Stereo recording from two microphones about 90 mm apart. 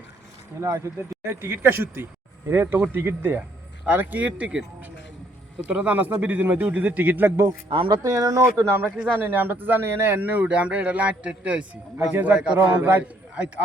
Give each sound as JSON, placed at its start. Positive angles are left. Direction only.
{"t": 0.6, "sound": "a man's voice", "side_deg": -35}
{"t": 5.6, "sound": "a man's voice", "side_deg": -15}
{"t": 7.9, "sound": "a man's voice", "side_deg": -45}